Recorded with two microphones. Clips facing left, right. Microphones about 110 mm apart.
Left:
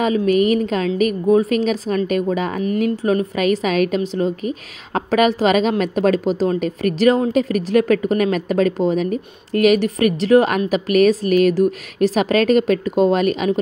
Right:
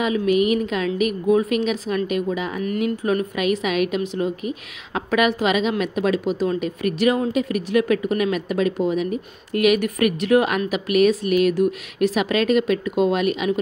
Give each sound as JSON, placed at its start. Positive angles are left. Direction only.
{"t": 0.0, "sound": "a woman's voice", "side_deg": 40}
{"t": 2.6, "sound": "a woman's voice", "side_deg": 30}